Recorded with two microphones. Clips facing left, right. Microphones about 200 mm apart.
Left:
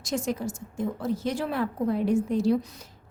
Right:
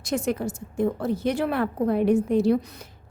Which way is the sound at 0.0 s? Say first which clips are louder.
Right 3 dB; 60° right (ahead or behind).